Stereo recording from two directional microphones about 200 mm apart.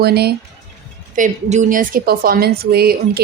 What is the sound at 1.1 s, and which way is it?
A woman's voice, 40° right (ahead or behind).